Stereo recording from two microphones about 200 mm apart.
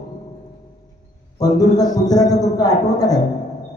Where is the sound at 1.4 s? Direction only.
20° left (ahead or behind).